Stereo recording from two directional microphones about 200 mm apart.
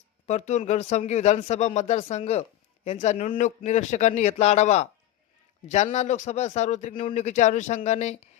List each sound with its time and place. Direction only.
0.3 s a man's voice: 35° left (ahead or behind)